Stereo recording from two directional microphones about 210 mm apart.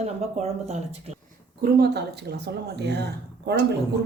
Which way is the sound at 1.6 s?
50° right (ahead or behind).